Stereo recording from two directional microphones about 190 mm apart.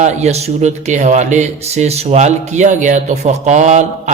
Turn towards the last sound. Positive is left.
turn(degrees=-35)  # may be behind; listen again after turning